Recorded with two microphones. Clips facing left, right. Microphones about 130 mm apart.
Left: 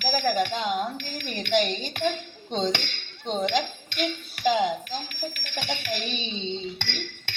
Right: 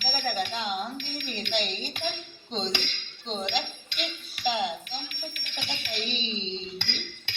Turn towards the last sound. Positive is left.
turn(degrees=50)  # may be behind; listen again after turning